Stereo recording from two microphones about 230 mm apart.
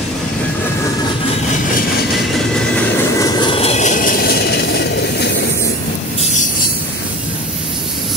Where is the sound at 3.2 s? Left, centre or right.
Left.